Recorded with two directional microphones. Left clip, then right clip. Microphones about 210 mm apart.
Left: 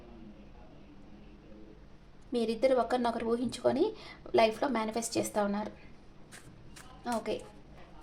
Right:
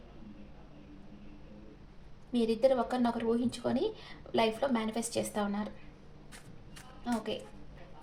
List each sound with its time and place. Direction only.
2.3 s a woman's voice: 45° left (ahead or behind)
7.0 s a woman's voice: 50° left (ahead or behind)